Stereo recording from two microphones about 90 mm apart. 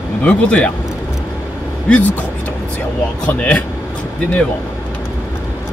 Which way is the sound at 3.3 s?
15° left (ahead or behind).